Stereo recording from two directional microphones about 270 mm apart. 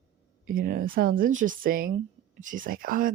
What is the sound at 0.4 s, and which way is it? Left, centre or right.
Speech, right.